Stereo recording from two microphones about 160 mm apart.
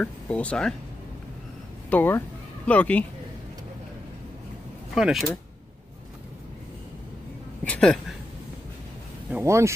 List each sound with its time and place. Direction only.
0.0 s speech: 10° left (ahead or behind)
1.9 s speech: 10° left (ahead or behind)
4.9 s speech: 5° right (ahead or behind)
7.6 s speech: 5° left (ahead or behind)
9.3 s speech: 15° right (ahead or behind)